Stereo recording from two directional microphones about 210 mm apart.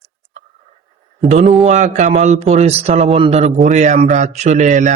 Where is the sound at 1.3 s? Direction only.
35° right (ahead or behind).